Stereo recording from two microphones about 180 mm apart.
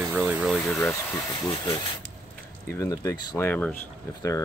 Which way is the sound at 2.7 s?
20° left (ahead or behind).